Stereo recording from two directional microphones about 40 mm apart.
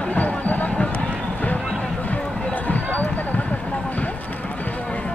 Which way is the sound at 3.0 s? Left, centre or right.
Left.